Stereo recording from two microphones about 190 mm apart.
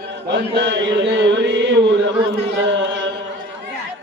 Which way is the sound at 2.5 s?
65° right (ahead or behind).